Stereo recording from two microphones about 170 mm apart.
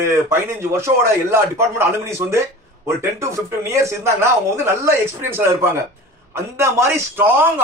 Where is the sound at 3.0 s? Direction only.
15° right (ahead or behind).